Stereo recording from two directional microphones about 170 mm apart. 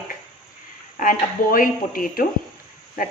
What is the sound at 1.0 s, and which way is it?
A woman's voice, 55° left (ahead or behind).